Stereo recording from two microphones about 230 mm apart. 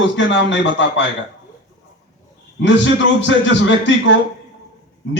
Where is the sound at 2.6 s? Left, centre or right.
Left.